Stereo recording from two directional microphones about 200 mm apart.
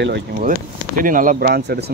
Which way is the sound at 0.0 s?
50° right (ahead or behind).